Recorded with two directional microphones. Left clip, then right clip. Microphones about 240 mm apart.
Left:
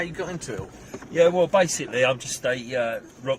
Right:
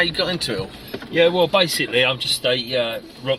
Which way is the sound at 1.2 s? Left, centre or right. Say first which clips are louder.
Right 2 dB; centre.